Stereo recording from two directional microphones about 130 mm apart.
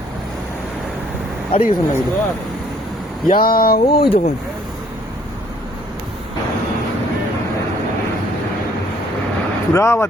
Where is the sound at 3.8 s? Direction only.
45° left (ahead or behind).